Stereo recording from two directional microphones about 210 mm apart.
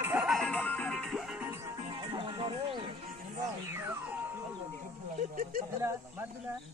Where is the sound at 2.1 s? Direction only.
25° right (ahead or behind).